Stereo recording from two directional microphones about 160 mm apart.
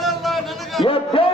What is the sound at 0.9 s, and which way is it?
Speech, 35° left (ahead or behind).